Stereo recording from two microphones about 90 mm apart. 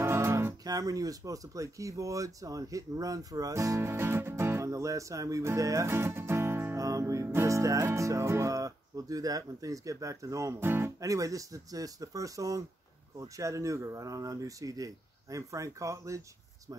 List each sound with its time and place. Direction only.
0.0 s music: 30° right (ahead or behind)
0.7 s speech: 45° right (ahead or behind); by 6.8 s 25° right (ahead or behind)
6.8 s music: 40° right (ahead or behind)
7.3 s speech: 35° right (ahead or behind)
11.0 s speech: 40° right (ahead or behind)